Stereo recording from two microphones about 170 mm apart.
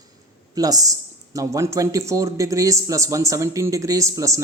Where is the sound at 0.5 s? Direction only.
20° right (ahead or behind).